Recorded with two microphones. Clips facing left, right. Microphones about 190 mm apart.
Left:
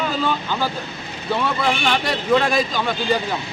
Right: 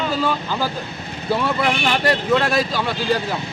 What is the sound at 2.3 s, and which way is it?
Speech, 5° right (ahead or behind).